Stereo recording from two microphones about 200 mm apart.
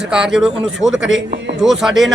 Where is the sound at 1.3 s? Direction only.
60° right (ahead or behind).